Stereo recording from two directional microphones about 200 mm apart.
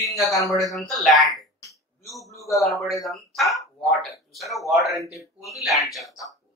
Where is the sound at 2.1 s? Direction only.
15° left (ahead or behind).